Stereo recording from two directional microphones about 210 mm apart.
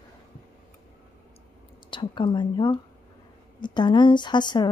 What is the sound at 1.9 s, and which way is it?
A woman's voice, 25° left (ahead or behind).